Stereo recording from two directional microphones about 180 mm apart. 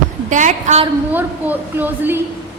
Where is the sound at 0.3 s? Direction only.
45° right (ahead or behind).